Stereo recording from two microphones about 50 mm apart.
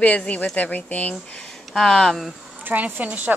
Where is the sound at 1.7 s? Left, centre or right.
Centre.